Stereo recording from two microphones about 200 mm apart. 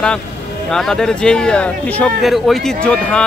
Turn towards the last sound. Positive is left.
turn(degrees=5)  # may be behind; listen again after turning